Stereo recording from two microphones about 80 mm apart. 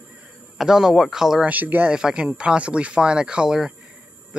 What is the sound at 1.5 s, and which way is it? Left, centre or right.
Speech, right.